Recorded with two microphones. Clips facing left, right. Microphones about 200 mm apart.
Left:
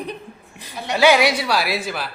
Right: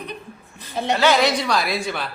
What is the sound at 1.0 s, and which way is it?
A man's voice, 10° left (ahead or behind).